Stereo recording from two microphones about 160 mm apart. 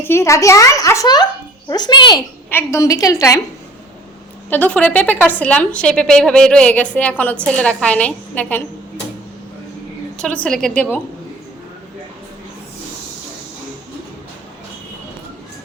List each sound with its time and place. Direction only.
0.0 s a child's voice: 15° left (ahead or behind)
2.5 s a child's voice: 15° left (ahead or behind)
4.4 s a woman's voice: 10° left (ahead or behind)
10.2 s a woman's voice: 5° left (ahead or behind)